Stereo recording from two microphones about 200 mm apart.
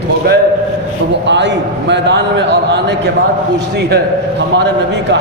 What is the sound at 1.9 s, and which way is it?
Speech, 60° right (ahead or behind).